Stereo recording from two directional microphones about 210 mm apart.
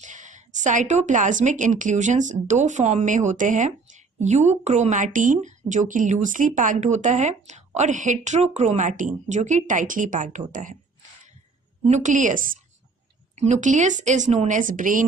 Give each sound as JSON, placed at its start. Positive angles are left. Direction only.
{"t": 0.0, "sound": "a woman's voice", "side_deg": -35}
{"t": 11.9, "sound": "a woman's voice", "side_deg": -35}